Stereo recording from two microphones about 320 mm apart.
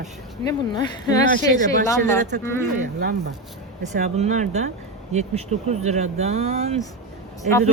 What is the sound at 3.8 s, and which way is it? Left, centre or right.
Speech, right.